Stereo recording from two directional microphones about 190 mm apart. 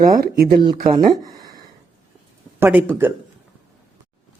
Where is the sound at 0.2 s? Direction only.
50° right (ahead or behind).